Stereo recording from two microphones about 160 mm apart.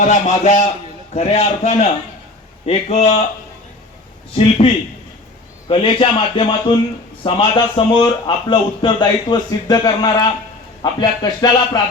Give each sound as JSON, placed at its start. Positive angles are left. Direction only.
{"t": 0.0, "sound": "a man's voice", "side_deg": 50}
{"t": 4.4, "sound": "a man's voice", "side_deg": 35}